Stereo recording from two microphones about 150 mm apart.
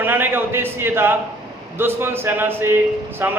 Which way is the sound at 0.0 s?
15° right (ahead or behind).